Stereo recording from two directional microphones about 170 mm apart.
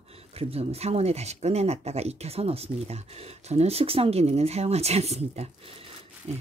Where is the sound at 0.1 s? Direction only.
35° right (ahead or behind).